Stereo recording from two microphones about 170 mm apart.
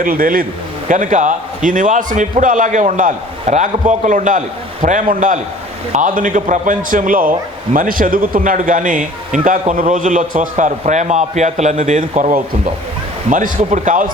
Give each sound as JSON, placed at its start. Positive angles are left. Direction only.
{"t": 0.0, "sound": "a man's voice", "side_deg": -55}